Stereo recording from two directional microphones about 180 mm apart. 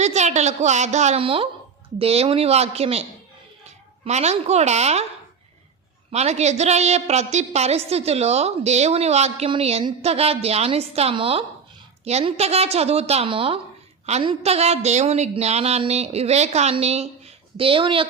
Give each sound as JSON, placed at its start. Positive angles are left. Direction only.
{"t": 0.0, "sound": "a woman's voice", "side_deg": -40}
{"t": 6.1, "sound": "a woman's voice", "side_deg": -35}